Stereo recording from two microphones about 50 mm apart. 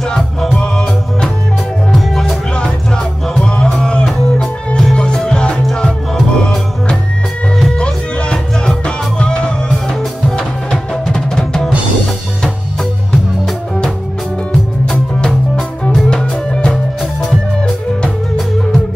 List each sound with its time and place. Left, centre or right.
0.1 s music: centre
2.0 s music: centre
3.3 s music: centre
11.1 s music: centre
14.9 s music: centre